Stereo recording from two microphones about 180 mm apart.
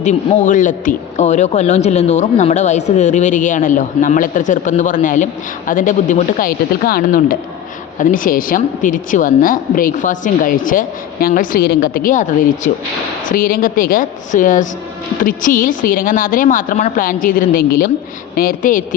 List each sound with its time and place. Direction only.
0.0 s a woman's voice: 45° left (ahead or behind)